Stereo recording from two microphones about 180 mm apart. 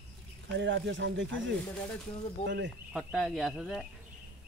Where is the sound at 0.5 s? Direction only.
80° right.